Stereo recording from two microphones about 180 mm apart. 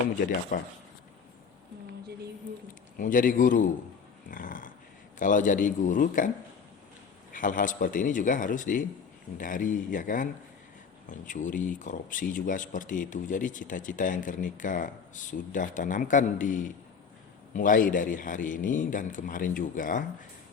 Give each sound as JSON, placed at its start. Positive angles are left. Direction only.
{"t": 0.5, "sound": "speech", "side_deg": 50}
{"t": 3.0, "sound": "speech", "side_deg": 45}
{"t": 4.3, "sound": "dog", "side_deg": 50}
{"t": 5.2, "sound": "speech", "side_deg": 45}
{"t": 7.3, "sound": "speech", "side_deg": 45}